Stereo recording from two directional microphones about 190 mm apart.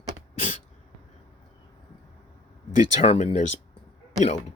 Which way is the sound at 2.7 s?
40° left (ahead or behind).